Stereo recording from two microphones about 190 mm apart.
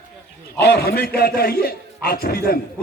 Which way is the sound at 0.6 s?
55° left (ahead or behind).